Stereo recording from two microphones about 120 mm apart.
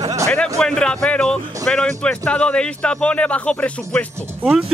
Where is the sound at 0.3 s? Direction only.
5° left (ahead or behind).